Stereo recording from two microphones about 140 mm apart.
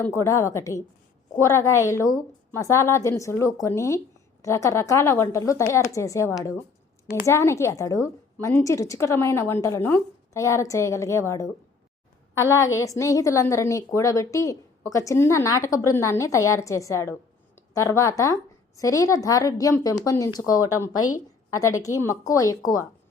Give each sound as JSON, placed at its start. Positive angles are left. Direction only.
{"t": 0.0, "sound": "a woman's voice", "side_deg": 20}